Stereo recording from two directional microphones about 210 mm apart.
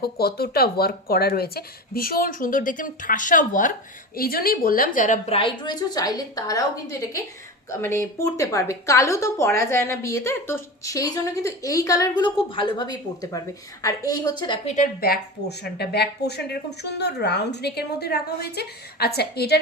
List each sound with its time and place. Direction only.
0.0 s a woman's voice: 50° left (ahead or behind); by 6.7 s 15° left (ahead or behind)
7.7 s a woman's voice: 10° left (ahead or behind)
14.8 s speech: 45° left (ahead or behind)